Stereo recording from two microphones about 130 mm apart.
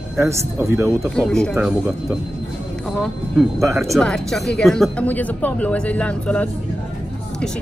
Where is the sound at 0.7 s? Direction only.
20° right (ahead or behind).